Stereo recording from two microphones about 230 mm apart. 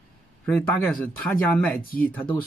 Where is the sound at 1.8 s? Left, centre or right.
Left.